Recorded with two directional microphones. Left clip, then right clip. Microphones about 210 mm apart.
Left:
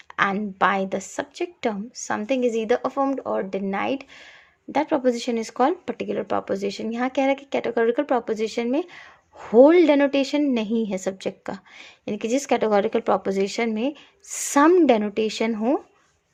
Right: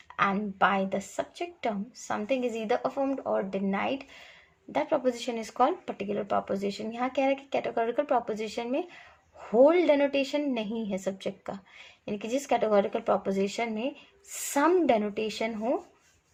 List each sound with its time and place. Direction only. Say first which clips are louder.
0.2 s speech: left 4 dB; 45° left (ahead or behind)